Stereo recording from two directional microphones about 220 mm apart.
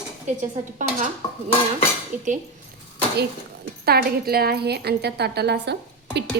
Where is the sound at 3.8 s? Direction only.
45° right (ahead or behind).